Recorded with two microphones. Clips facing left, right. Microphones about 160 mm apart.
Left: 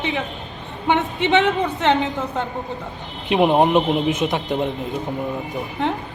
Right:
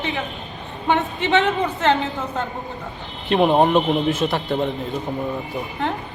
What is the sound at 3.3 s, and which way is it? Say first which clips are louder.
A man's voice: even; 10° left (ahead or behind).